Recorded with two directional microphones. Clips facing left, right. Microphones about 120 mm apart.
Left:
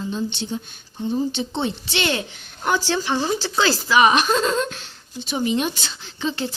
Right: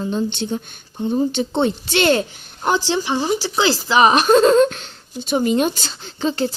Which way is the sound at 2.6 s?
20° right (ahead or behind).